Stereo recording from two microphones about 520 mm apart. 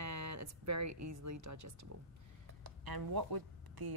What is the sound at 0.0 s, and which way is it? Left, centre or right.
Speech, right.